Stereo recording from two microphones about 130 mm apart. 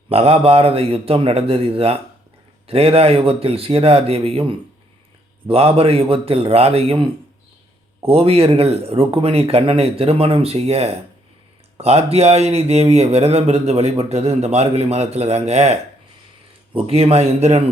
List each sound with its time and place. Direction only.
0.1 s speech: 50° right (ahead or behind)